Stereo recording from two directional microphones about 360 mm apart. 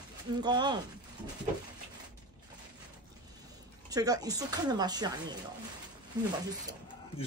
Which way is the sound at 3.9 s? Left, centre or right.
Centre.